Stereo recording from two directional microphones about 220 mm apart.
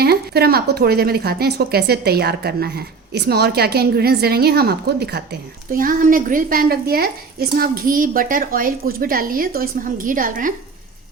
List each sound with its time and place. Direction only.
0.0 s a woman's voice: 45° right (ahead or behind)